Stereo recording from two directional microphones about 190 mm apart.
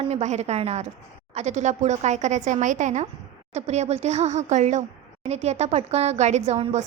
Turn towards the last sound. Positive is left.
turn(degrees=-35)  # may be behind; listen again after turning